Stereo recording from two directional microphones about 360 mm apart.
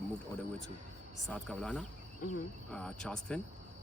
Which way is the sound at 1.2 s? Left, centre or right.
Centre.